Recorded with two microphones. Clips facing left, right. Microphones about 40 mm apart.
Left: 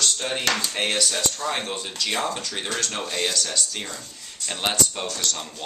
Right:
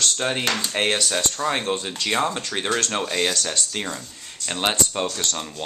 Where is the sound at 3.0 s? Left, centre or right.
Centre.